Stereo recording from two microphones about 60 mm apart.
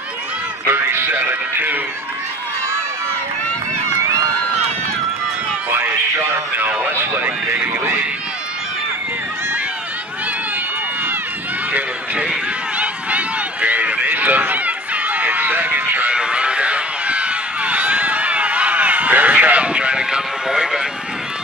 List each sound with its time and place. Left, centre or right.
0.7 s speech: right
6.9 s speech: right
12.7 s run: right
16.2 s run: centre